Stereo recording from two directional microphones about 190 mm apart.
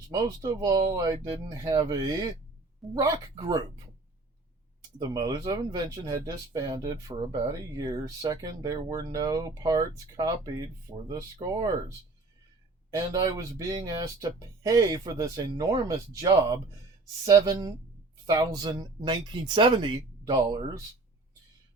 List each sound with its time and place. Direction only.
0.1 s speech: 20° right (ahead or behind)
4.9 s speech: 20° right (ahead or behind)
17.2 s speech: 20° right (ahead or behind)